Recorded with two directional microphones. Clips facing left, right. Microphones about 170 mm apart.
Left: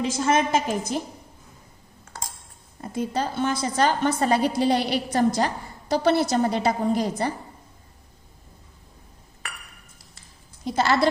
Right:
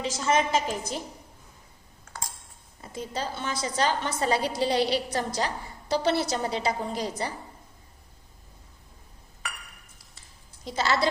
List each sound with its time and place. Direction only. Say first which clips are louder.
0.0 s a woman's voice: left 3 dB; 50° left (ahead or behind)
2.8 s a woman's voice: left 6 dB; 55° left (ahead or behind)
10.7 s a woman's voice: left 5 dB; 55° left (ahead or behind)